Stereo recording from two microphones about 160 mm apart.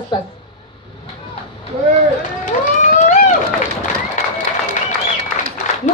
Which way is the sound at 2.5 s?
50° left (ahead or behind).